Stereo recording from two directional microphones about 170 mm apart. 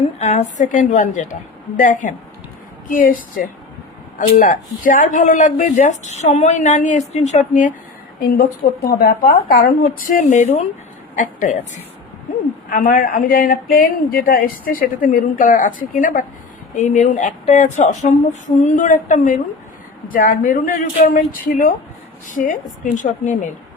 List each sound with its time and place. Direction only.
0.2 s speech: 45° left (ahead or behind)
8.2 s speech: 60° left (ahead or behind)